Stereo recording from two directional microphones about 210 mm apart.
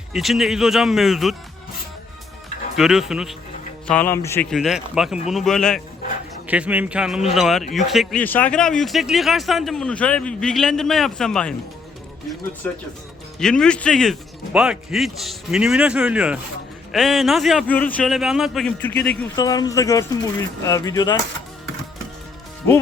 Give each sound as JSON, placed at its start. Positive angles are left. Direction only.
{"t": 0.1, "sound": "speech", "side_deg": 0}
{"t": 2.7, "sound": "speech", "side_deg": 0}
{"t": 4.4, "sound": "speech", "side_deg": 0}
{"t": 12.6, "sound": "speech", "side_deg": 5}